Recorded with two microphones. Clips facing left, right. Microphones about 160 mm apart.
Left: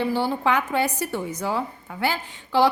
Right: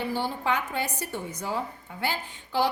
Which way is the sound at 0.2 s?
90° left.